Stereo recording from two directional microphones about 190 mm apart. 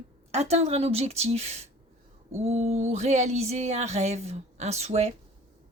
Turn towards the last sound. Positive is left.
turn(degrees=-35)  # may be behind; listen again after turning